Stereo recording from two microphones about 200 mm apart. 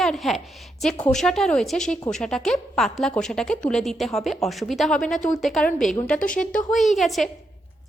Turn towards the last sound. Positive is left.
turn(degrees=0)  # may be behind; listen again after turning